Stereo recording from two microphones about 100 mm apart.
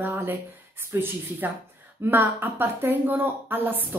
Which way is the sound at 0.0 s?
20° right (ahead or behind).